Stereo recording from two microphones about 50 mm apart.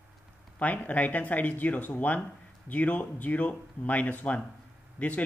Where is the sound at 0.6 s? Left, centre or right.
Left.